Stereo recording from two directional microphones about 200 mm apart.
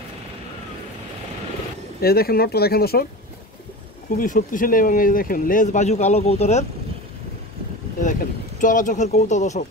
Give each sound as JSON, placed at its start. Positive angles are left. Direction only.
{"t": 2.0, "sound": "speech", "side_deg": 50}
{"t": 4.2, "sound": "speech", "side_deg": 45}
{"t": 8.0, "sound": "speech", "side_deg": 40}